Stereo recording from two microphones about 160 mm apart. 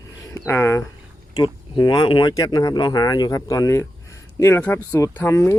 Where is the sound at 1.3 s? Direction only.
30° left (ahead or behind).